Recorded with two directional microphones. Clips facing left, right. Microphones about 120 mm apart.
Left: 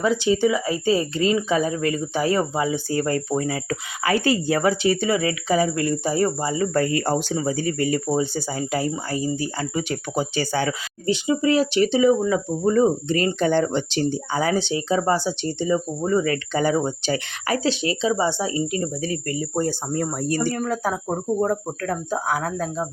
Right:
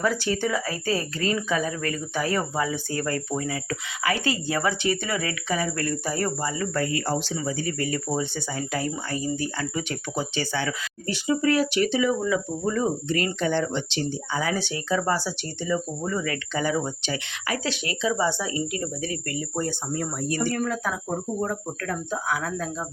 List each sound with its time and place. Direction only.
0.0 s speech: 15° left (ahead or behind)
7.0 s speech: 50° left (ahead or behind)
7.3 s speech: 40° left (ahead or behind)
11.0 s speech: 20° left (ahead or behind); by 14.5 s 45° left (ahead or behind)
14.5 s speech: 25° left (ahead or behind); by 22.9 s 40° left (ahead or behind)